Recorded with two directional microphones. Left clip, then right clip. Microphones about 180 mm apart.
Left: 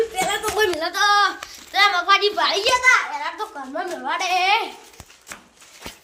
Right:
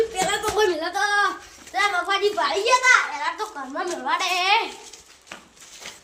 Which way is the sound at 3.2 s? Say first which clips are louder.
Right 1 dB; 15° left (ahead or behind).